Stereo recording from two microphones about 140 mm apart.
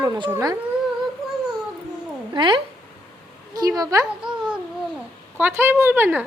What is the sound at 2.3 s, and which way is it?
A woman's voice, 35° right (ahead or behind).